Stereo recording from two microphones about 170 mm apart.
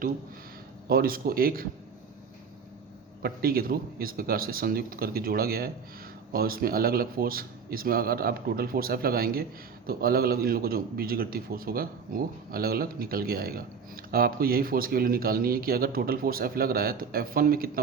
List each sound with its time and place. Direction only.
0.9 s speech: 60° right (ahead or behind)
3.2 s speech: 60° right (ahead or behind)